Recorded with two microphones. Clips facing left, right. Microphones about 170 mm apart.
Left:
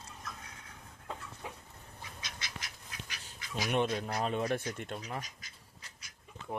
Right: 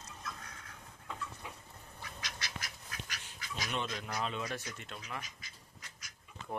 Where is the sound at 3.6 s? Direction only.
55° left (ahead or behind).